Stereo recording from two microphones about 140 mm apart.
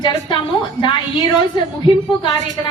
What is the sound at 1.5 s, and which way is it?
Speech, 35° left (ahead or behind).